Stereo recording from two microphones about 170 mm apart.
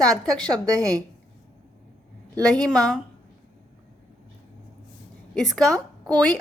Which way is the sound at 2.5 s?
5° left (ahead or behind).